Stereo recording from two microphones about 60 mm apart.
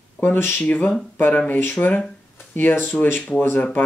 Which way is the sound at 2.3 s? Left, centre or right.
Left.